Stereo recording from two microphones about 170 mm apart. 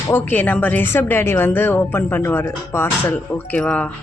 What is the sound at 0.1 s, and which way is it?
A woman's voice, 10° left (ahead or behind).